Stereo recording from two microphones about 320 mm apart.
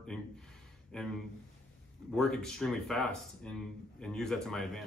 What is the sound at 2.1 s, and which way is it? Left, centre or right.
Speech, centre.